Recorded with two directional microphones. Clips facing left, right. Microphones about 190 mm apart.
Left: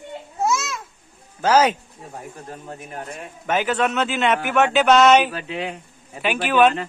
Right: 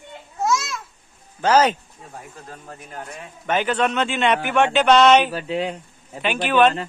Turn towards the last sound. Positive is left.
turn(degrees=10)  # may be behind; listen again after turning